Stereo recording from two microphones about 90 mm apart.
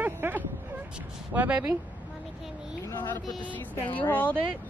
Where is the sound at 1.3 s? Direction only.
15° right (ahead or behind).